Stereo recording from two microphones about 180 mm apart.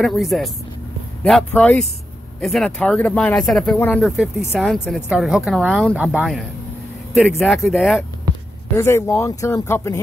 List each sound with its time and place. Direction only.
0.0 s a woman's voice: centre (ahead or behind)
1.5 s a woman's voice: 5° left (ahead or behind)
4.5 s a woman's voice: centre (ahead or behind)
8.7 s speech: 15° left (ahead or behind)